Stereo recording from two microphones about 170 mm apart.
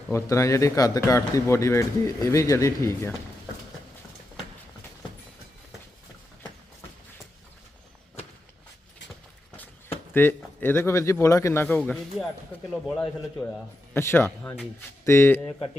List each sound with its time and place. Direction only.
0.1 s speech: 15° left (ahead or behind)
10.2 s speech: 10° left (ahead or behind)
13.9 s speech: 15° left (ahead or behind)